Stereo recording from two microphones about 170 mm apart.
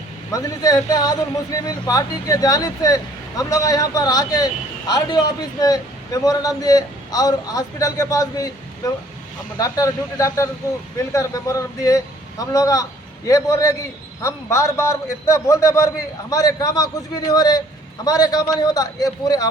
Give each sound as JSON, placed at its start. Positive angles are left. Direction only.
{"t": 0.3, "sound": "a man's voice", "side_deg": 20}